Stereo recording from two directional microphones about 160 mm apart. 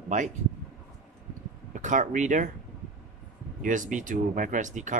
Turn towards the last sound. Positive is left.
turn(degrees=-50)  # may be behind; listen again after turning